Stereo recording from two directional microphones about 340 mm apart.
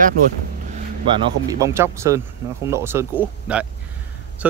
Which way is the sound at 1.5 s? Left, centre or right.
Centre.